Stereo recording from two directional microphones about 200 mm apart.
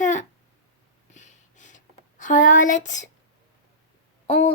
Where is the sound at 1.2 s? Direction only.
35° left (ahead or behind).